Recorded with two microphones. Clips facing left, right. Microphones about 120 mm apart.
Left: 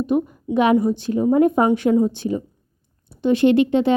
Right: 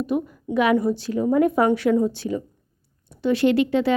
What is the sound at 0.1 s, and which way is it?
A woman's voice, 25° left (ahead or behind).